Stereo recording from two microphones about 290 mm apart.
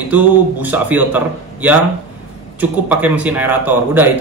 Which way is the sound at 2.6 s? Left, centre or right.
Centre.